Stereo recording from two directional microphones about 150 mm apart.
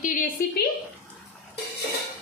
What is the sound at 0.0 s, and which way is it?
Speech, 60° left (ahead or behind).